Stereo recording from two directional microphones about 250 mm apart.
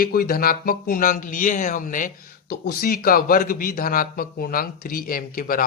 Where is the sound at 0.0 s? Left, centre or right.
Left.